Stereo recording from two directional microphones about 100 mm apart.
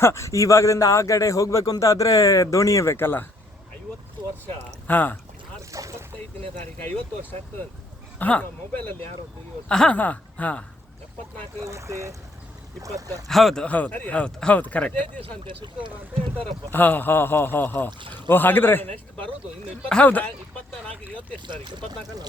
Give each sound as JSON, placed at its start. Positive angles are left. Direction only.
{"t": 0.0, "sound": "a man's voice", "side_deg": 30}
{"t": 4.9, "sound": "speech", "side_deg": 20}
{"t": 5.7, "sound": "boat", "side_deg": -30}
{"t": 6.7, "sound": "speech", "side_deg": 20}
{"t": 11.6, "sound": "speech", "side_deg": -30}
{"t": 13.2, "sound": "speech", "side_deg": 0}
{"t": 13.7, "sound": "speech", "side_deg": 15}
{"t": 15.2, "sound": "speech", "side_deg": -55}
{"t": 16.7, "sound": "speech", "side_deg": 20}
{"t": 19.9, "sound": "speech", "side_deg": 15}
{"t": 21.4, "sound": "speech", "side_deg": -50}